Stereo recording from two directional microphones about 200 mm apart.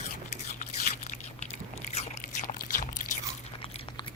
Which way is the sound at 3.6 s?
30° left (ahead or behind).